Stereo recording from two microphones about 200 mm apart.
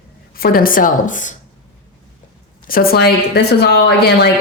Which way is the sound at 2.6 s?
45° left (ahead or behind).